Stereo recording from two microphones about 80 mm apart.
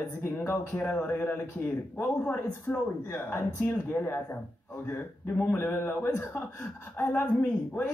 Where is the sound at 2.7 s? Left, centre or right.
Centre.